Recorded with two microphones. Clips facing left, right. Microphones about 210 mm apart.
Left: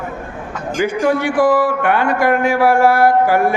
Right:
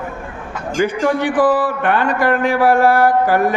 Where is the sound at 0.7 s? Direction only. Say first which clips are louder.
Even; 10° left (ahead or behind).